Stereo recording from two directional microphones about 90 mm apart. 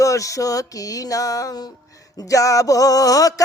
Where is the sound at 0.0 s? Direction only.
35° left (ahead or behind).